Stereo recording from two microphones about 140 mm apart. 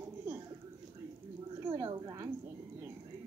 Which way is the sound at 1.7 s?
25° right (ahead or behind).